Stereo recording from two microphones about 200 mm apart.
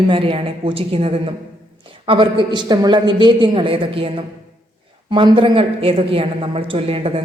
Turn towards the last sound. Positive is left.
turn(degrees=-30)  # may be behind; listen again after turning